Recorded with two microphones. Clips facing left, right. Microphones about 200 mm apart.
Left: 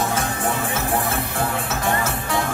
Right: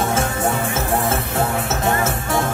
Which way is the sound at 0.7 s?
25° right (ahead or behind).